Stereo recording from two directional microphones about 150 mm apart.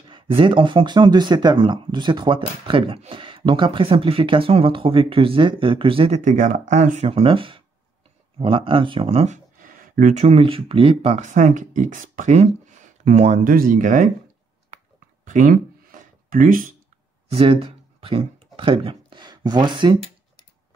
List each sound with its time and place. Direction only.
0.4 s speech: 35° right (ahead or behind)
6.2 s speech: 55° right (ahead or behind)
9.6 s a sound: 65° right (ahead or behind)
10.2 s speech: 40° right (ahead or behind)
11.1 s speech: 55° right (ahead or behind)
15.2 s a sound: 65° right (ahead or behind)
17.3 s speech: 40° right (ahead or behind)